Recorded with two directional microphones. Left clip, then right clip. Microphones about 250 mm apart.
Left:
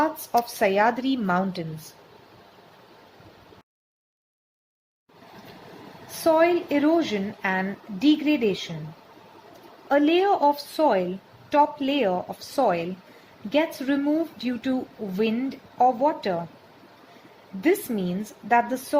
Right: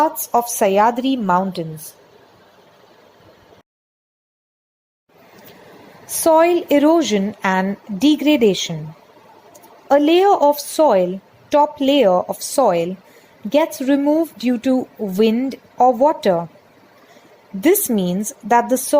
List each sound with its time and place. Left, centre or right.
0.0 s a woman's voice: right
6.2 s a woman's voice: right
9.9 s a woman's voice: right
17.6 s a woman's voice: right